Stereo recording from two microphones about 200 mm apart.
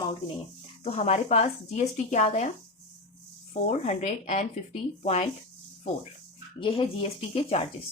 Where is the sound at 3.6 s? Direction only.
35° left (ahead or behind).